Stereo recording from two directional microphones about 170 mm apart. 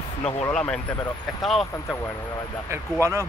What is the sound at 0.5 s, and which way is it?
Speech, 5° left (ahead or behind).